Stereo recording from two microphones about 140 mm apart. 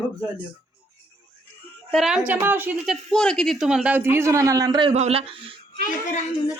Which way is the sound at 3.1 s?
5° left (ahead or behind).